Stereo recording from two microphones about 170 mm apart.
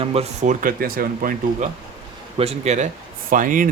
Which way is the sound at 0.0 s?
35° right (ahead or behind).